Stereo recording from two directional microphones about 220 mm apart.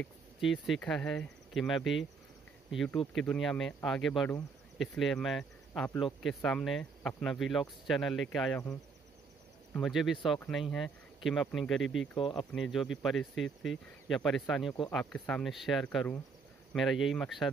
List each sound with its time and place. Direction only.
0.0 s speech: centre (ahead or behind)
9.8 s speech: centre (ahead or behind)
11.8 s speech: 60° left (ahead or behind)
13.0 s speech: centre (ahead or behind)